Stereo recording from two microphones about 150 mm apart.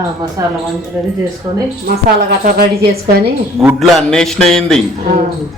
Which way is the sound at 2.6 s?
90° right.